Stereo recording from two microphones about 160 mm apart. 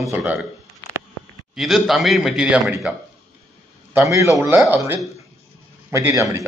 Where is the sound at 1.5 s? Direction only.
Centre (ahead or behind).